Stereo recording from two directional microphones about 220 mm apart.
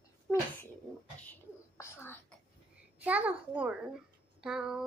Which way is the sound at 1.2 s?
10° left (ahead or behind).